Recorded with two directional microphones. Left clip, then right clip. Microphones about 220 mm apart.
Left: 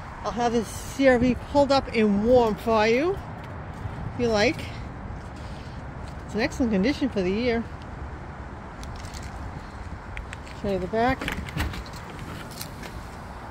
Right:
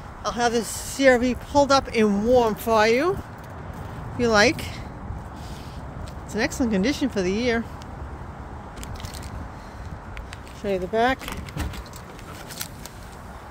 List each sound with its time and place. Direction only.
0.2 s speech: 5° left (ahead or behind)
4.2 s speech: 10° right (ahead or behind)
6.3 s speech: 5° left (ahead or behind)
10.6 s speech: 15° right (ahead or behind)